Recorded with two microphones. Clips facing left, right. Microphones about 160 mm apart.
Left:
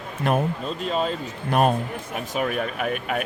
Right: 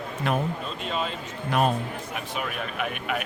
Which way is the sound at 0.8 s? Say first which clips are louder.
Left 6 dB; 40° left (ahead or behind).